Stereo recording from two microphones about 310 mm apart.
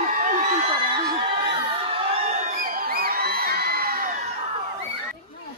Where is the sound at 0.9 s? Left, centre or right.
Centre.